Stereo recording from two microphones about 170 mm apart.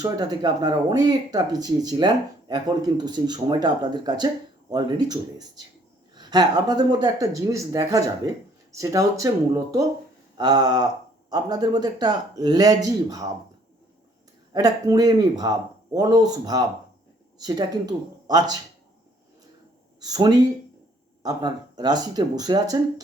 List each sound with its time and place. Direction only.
0.0 s speech: 25° right (ahead or behind)
10.3 s speech: 25° right (ahead or behind)
14.5 s speech: 20° right (ahead or behind)
20.0 s speech: 20° right (ahead or behind)